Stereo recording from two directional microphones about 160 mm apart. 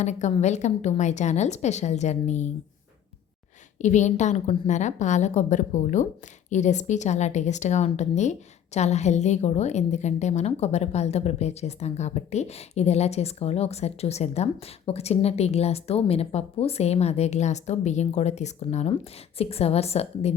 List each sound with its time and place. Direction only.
0.0 s a woman's voice: 45° left (ahead or behind)
3.8 s a woman's voice: 50° left (ahead or behind)